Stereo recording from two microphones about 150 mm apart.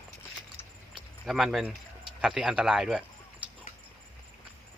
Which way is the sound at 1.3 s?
Centre (ahead or behind).